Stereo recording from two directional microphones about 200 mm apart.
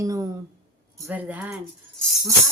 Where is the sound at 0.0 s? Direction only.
15° right (ahead or behind).